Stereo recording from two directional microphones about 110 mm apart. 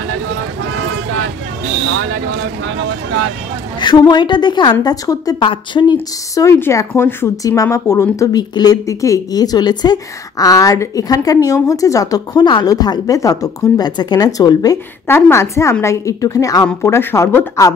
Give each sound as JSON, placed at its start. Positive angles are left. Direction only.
{"t": 3.8, "sound": "speech", "side_deg": 40}
{"t": 5.4, "sound": "speech", "side_deg": 50}
{"t": 6.3, "sound": "speech", "side_deg": 25}
{"t": 15.0, "sound": "a woman's voice", "side_deg": 20}